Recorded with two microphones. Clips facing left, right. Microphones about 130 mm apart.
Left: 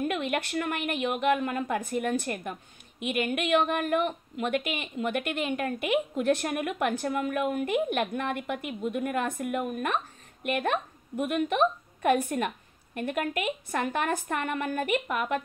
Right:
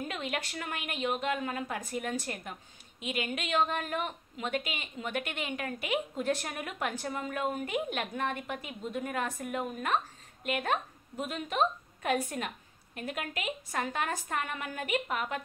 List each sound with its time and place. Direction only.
0.0 s a woman's voice: 55° left (ahead or behind)
11.1 s a woman's voice: 60° left (ahead or behind)
12.9 s a woman's voice: 55° left (ahead or behind)